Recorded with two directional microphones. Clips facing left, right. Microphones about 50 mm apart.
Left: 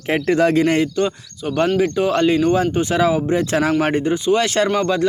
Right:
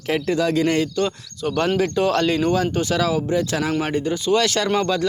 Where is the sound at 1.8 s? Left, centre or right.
Centre.